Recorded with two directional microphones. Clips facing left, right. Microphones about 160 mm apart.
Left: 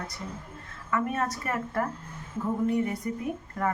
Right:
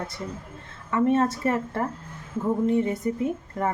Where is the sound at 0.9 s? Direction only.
25° right (ahead or behind).